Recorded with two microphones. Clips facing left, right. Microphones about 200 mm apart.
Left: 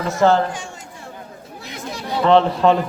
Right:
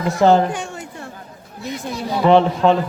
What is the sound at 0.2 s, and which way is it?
Speech, 15° right (ahead or behind).